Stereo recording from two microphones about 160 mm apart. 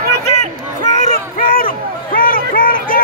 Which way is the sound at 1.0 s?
60° left (ahead or behind).